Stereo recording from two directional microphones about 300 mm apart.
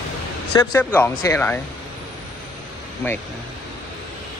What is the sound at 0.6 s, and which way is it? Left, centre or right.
Speech, centre.